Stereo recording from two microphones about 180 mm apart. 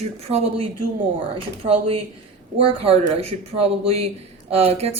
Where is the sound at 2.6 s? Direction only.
35° right (ahead or behind).